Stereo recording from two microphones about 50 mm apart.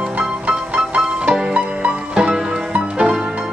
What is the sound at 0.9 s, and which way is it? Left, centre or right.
Music, centre.